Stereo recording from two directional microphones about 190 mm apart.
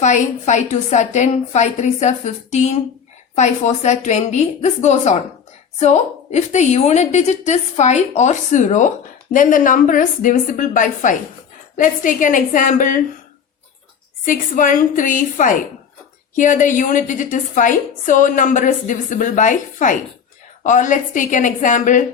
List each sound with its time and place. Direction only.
0.0 s a woman's voice: 40° left (ahead or behind)
14.3 s a woman's voice: 45° left (ahead or behind)